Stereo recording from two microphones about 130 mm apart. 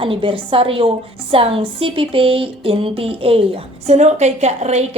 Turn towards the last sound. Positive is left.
turn(degrees=-60)  # may be behind; listen again after turning